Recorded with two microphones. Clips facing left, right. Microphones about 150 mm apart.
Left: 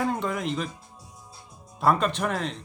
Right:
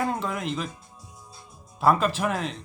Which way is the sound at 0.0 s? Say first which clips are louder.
Left 1 dB; centre (ahead or behind).